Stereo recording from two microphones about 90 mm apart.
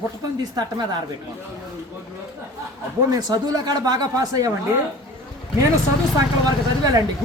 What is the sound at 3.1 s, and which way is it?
Speech, 45° right (ahead or behind).